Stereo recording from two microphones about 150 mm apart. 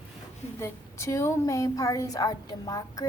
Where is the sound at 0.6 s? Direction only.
20° left (ahead or behind).